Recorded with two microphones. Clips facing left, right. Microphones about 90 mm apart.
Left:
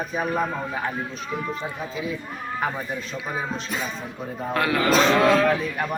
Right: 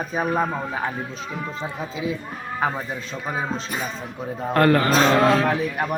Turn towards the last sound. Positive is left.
turn(degrees=-15)  # may be behind; listen again after turning